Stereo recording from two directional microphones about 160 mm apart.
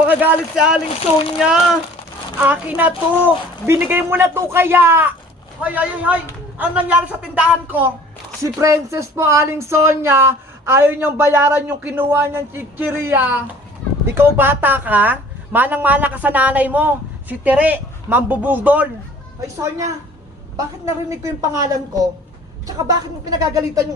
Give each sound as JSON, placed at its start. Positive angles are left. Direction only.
{"t": 0.1, "sound": "speech", "side_deg": -10}
{"t": 21.1, "sound": "speech", "side_deg": -20}